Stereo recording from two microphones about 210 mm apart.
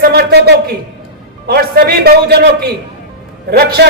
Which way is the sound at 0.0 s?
50° right (ahead or behind).